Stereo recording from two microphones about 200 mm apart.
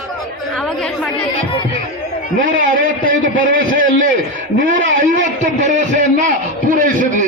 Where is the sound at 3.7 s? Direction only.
40° right (ahead or behind).